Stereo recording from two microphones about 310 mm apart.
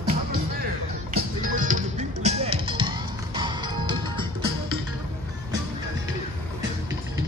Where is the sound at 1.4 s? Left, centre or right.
Right.